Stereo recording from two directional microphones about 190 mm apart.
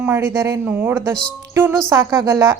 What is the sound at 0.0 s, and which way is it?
A man's voice, 15° right (ahead or behind).